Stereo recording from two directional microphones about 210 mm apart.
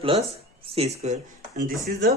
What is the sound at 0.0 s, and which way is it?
Speech, 25° right (ahead or behind).